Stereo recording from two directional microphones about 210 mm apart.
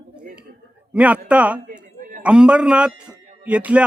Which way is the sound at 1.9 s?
35° right (ahead or behind).